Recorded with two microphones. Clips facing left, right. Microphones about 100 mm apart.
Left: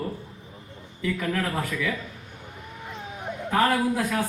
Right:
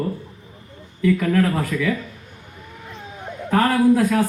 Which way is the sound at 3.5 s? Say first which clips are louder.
Right 6 dB; 10° left (ahead or behind).